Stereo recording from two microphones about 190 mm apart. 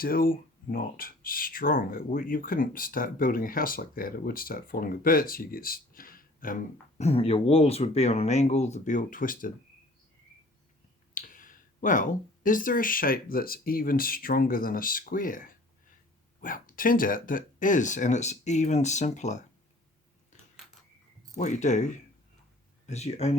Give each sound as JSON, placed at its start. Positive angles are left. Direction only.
{"t": 0.0, "sound": "speech", "side_deg": 50}
{"t": 7.0, "sound": "speech", "side_deg": 30}
{"t": 11.1, "sound": "speech", "side_deg": 45}
{"t": 21.3, "sound": "speech", "side_deg": 40}